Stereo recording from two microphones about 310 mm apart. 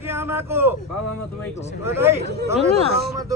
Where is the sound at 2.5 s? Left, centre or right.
Right.